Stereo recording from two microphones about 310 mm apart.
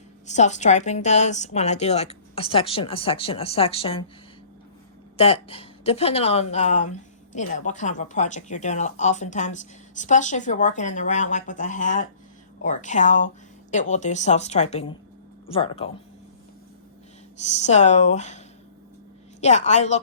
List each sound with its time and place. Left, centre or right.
0.3 s speech: left
5.1 s speech: centre
17.4 s speech: left